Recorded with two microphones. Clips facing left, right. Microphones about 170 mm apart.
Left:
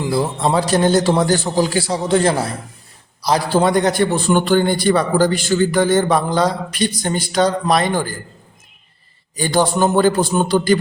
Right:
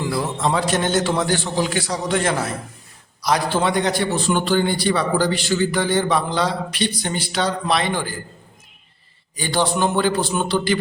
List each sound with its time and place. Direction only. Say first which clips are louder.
0.0 s a man's voice: left 4 dB; 30° left (ahead or behind); by 8.1 s 45° left (ahead or behind)
9.3 s a man's voice: left 4 dB; 45° left (ahead or behind)